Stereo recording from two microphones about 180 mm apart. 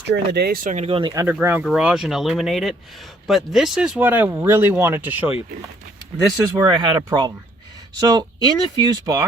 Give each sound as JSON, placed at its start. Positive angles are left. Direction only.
{"t": 0.1, "sound": "speech", "side_deg": -60}
{"t": 0.9, "sound": "speech", "side_deg": -30}
{"t": 1.1, "sound": "speech", "side_deg": -15}
{"t": 6.7, "sound": "speech", "side_deg": -25}